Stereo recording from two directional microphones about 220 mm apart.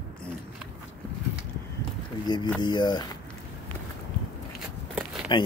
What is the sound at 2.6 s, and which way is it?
Speech, 20° left (ahead or behind).